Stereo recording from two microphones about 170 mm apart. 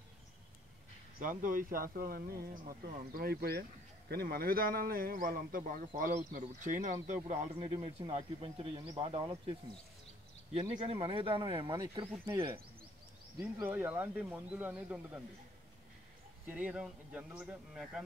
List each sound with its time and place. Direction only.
1.2 s speech: 50° right (ahead or behind)
7.5 s speech: 30° right (ahead or behind)
10.9 s speech: 30° right (ahead or behind)
13.4 s speech: 10° right (ahead or behind)
16.4 s speech: 10° right (ahead or behind)